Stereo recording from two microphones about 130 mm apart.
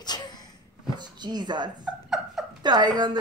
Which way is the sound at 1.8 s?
5° right (ahead or behind).